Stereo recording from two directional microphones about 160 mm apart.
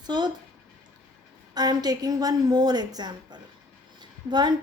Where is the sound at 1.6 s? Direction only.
25° right (ahead or behind).